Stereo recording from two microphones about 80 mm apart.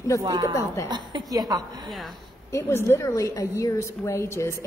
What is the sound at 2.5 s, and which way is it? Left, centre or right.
A woman's voice, left.